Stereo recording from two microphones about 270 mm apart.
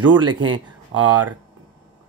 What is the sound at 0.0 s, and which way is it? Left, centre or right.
Speech, right.